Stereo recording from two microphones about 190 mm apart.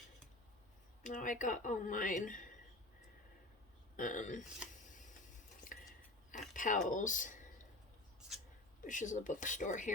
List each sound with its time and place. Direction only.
1.0 s speech: 45° left (ahead or behind)
3.9 s speech: 45° left (ahead or behind)
5.7 s a sound: 45° left (ahead or behind)
6.3 s speech: 45° left (ahead or behind)
8.8 s speech: 40° left (ahead or behind)